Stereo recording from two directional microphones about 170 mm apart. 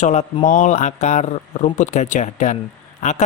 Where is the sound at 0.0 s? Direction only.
40° left (ahead or behind).